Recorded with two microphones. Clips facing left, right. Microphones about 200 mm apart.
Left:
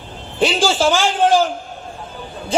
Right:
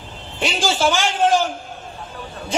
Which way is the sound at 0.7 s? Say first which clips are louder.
Left 3 dB; 30° left (ahead or behind).